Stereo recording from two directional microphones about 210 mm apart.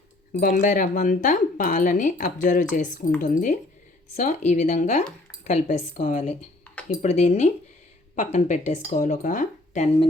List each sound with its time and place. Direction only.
0.3 s speech: 40° left (ahead or behind)